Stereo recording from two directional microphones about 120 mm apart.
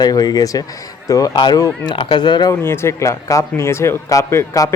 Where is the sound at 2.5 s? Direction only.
20° left (ahead or behind).